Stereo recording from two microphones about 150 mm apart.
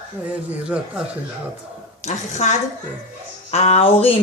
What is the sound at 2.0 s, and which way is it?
Speech, 50° left (ahead or behind).